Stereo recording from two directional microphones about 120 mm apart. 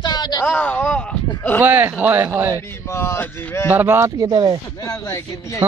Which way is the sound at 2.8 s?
20° left (ahead or behind).